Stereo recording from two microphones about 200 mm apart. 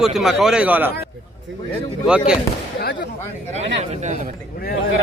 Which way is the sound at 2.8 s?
60° left (ahead or behind).